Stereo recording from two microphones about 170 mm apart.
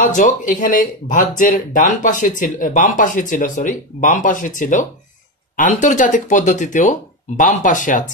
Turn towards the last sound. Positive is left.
turn(degrees=50)  # may be behind; listen again after turning